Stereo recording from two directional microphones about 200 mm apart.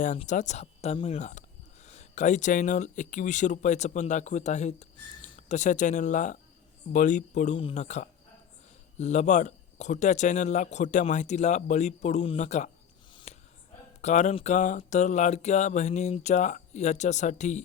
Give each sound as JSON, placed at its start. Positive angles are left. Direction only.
{"t": 0.0, "sound": "speech", "side_deg": 35}
{"t": 13.3, "sound": "a sound", "side_deg": 35}
{"t": 14.0, "sound": "speech", "side_deg": 35}